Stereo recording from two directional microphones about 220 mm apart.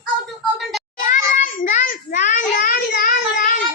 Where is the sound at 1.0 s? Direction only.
40° left (ahead or behind).